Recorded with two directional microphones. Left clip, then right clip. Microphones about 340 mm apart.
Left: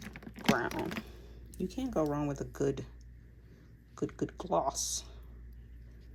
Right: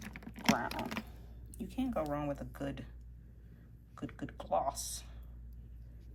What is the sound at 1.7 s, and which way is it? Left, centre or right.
Speech, centre.